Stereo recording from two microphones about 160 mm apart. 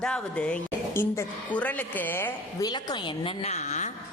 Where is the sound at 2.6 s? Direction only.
25° left (ahead or behind); by 3.9 s 45° left (ahead or behind).